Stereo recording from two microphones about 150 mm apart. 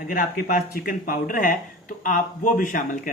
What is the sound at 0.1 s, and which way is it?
A man's voice, 70° left (ahead or behind).